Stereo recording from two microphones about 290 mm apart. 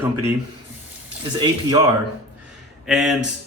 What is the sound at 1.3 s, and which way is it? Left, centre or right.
Speech, centre.